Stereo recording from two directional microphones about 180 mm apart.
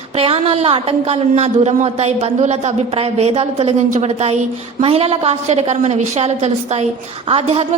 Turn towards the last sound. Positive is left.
turn(degrees=-35)  # may be behind; listen again after turning